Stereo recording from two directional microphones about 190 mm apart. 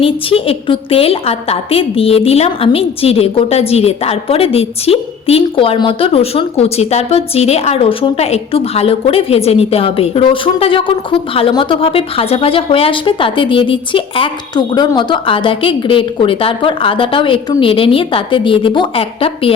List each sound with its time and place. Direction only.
0.0 s a woman's voice: 30° left (ahead or behind)